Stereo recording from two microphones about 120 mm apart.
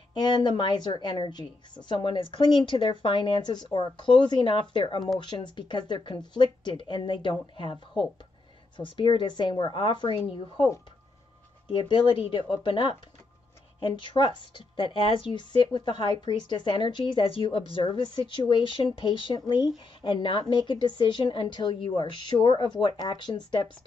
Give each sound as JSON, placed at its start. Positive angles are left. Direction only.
{"t": 0.1, "sound": "a woman's voice", "side_deg": 40}
{"t": 11.7, "sound": "a woman's voice", "side_deg": 40}